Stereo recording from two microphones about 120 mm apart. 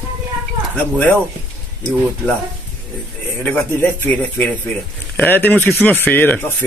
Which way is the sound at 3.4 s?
15° left (ahead or behind).